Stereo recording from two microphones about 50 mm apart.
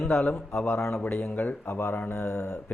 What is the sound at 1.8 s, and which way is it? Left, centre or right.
Speech, left.